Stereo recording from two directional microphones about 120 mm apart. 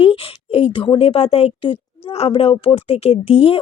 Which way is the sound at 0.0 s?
50° left (ahead or behind).